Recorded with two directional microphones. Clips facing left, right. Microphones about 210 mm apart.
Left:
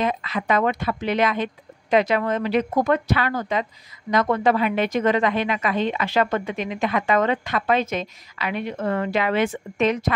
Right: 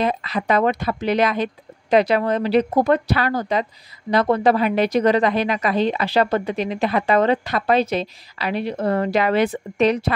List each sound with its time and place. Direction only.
0.0 s a woman's voice: 35° right (ahead or behind)